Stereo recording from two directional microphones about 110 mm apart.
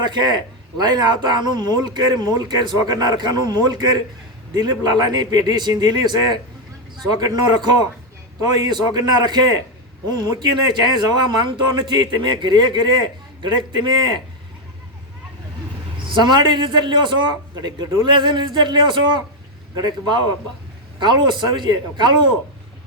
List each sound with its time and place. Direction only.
0.0 s a man's voice: 40° right (ahead or behind)
10.7 s a man's voice: 40° right (ahead or behind)
16.1 s a man's voice: 45° right (ahead or behind)